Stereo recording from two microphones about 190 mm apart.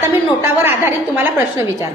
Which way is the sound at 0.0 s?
10° right (ahead or behind).